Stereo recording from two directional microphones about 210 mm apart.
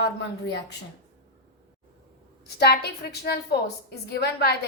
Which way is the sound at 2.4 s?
50° left (ahead or behind).